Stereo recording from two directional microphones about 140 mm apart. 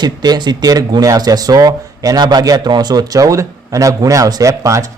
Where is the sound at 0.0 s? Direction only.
30° right (ahead or behind).